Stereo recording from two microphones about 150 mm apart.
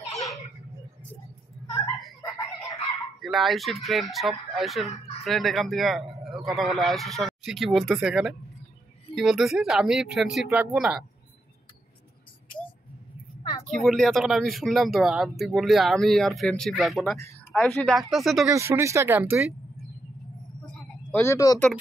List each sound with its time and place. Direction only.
3.2 s a man's voice: centre (ahead or behind)
13.7 s a man's voice: centre (ahead or behind)
18.5 s speech: 20° right (ahead or behind)
21.1 s speech: 15° left (ahead or behind)